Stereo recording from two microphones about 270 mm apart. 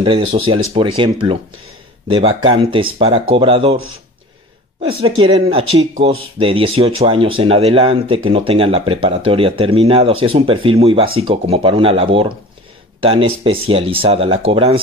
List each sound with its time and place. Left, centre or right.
0.3 s speech: right
4.8 s speech: centre